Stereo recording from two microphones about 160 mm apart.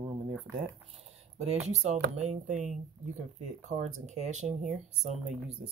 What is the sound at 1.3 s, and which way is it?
Speech, 45° right (ahead or behind).